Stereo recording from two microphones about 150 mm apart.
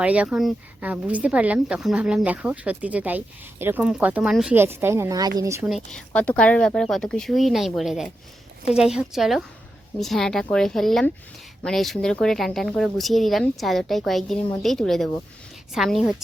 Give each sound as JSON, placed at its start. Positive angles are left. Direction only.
{"t": 0.0, "sound": "a woman's voice", "side_deg": -10}
{"t": 5.6, "sound": "speech", "side_deg": 0}